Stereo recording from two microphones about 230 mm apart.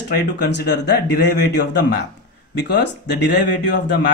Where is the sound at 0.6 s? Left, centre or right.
Left.